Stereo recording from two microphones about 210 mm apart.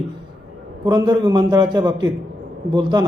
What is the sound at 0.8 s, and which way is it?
A man's voice, 20° right (ahead or behind).